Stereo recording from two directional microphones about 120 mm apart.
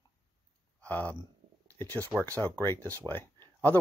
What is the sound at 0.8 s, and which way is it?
Speech, 10° left (ahead or behind).